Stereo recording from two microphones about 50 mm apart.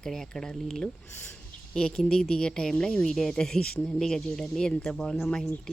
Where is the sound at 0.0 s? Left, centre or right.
Centre.